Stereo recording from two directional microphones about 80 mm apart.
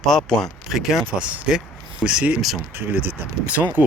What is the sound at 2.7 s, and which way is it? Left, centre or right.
Speech, right.